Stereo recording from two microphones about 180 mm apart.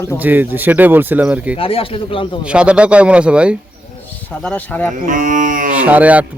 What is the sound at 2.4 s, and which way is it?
Speech, 5° right (ahead or behind).